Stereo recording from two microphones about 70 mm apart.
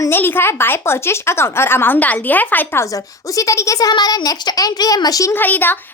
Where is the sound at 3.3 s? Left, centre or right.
Left.